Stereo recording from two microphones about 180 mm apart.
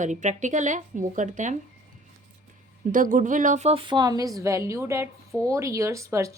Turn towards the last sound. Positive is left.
turn(degrees=-15)  # may be behind; listen again after turning